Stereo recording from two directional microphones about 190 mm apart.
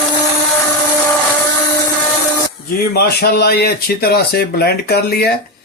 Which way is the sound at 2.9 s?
55° left (ahead or behind).